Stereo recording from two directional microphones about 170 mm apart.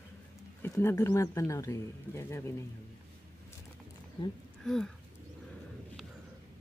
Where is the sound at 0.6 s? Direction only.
15° left (ahead or behind).